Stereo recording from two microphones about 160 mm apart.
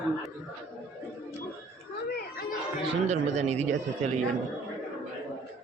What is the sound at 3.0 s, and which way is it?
Speech, 45° right (ahead or behind).